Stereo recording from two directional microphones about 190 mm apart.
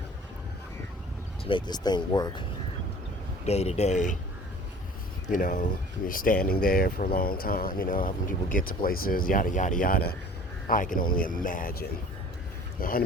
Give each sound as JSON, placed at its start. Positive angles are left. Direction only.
{"t": 1.5, "sound": "speech", "side_deg": 25}
{"t": 3.4, "sound": "speech", "side_deg": 35}
{"t": 5.3, "sound": "speech", "side_deg": 45}